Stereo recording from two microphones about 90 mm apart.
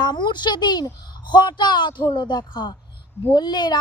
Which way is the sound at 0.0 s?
55° left (ahead or behind).